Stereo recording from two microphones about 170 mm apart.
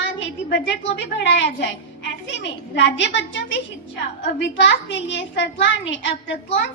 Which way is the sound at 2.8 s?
90° left.